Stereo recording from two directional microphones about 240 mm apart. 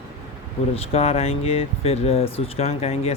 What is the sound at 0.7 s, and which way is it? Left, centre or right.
Speech, left.